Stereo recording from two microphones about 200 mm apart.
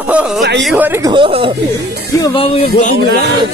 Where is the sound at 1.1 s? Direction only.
25° right (ahead or behind).